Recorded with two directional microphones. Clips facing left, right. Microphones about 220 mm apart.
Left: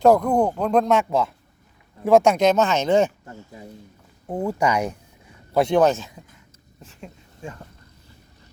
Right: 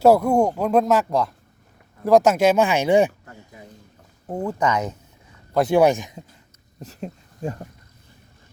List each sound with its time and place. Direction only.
0.0 s speech: 10° right (ahead or behind)
4.3 s speech: 10° left (ahead or behind)
5.7 s speech: 15° right (ahead or behind)
6.8 s speech: 40° right (ahead or behind)